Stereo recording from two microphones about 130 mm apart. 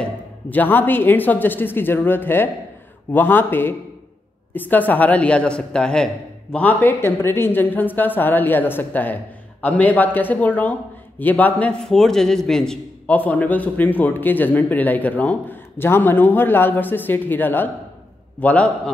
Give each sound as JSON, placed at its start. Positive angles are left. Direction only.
{"t": 0.0, "sound": "speech", "side_deg": 15}